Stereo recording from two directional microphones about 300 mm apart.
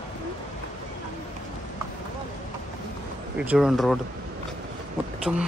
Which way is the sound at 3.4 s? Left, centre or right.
Centre.